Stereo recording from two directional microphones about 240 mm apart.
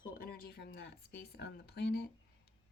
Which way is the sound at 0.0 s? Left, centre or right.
Left.